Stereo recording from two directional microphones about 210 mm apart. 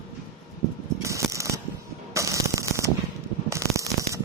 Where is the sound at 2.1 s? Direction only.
15° right (ahead or behind).